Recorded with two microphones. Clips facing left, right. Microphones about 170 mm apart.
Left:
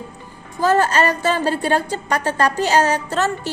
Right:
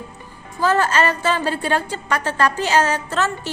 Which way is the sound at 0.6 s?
40° left (ahead or behind).